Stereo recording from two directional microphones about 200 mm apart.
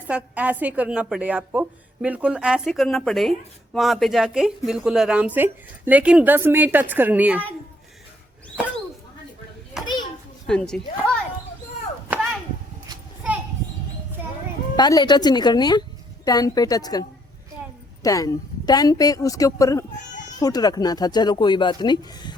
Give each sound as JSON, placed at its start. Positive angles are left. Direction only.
{"t": 0.1, "sound": "a woman's voice", "side_deg": -5}
{"t": 9.8, "sound": "children playing", "side_deg": -5}
{"t": 10.4, "sound": "a woman's voice", "side_deg": 5}
{"t": 12.1, "sound": "chop", "side_deg": -10}
{"t": 14.8, "sound": "a woman's voice", "side_deg": 20}